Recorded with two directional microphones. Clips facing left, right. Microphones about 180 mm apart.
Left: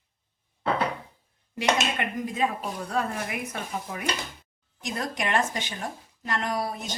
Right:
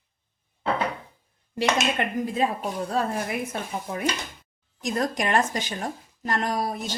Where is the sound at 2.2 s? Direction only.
35° right (ahead or behind).